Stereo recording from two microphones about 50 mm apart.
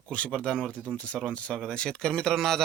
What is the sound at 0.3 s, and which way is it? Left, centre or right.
Speech, centre.